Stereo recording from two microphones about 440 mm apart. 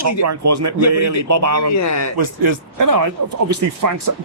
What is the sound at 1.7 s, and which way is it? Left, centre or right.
Speech, left.